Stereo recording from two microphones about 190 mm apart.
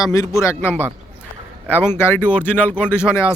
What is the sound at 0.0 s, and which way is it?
Speech, 20° left (ahead or behind).